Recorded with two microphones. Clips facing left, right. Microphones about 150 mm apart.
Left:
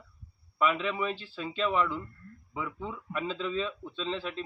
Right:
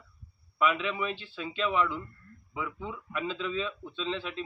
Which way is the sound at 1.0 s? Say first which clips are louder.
Left 1 dB; 40° left (ahead or behind).